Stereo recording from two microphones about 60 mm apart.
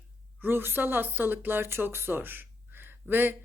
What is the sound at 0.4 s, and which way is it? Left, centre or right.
Speech, right.